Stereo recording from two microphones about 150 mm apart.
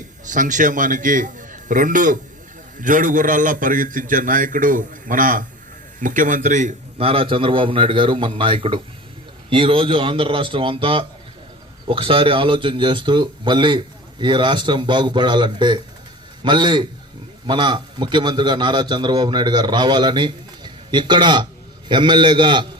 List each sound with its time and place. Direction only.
0.3 s a man's voice: 60° right (ahead or behind)
7.0 s speech: 40° right (ahead or behind)